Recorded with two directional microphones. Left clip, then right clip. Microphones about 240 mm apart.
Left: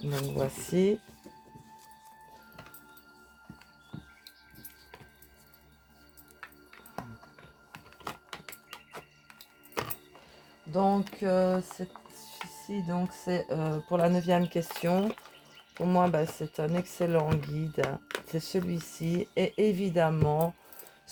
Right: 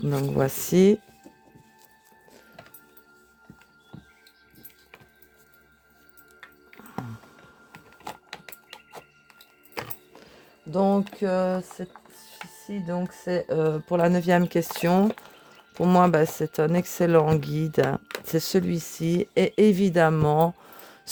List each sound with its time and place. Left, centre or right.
0.1 s speech: right
3.9 s music: centre
8.7 s music: centre
10.7 s music: right
11.2 s speech: right
12.9 s speech: right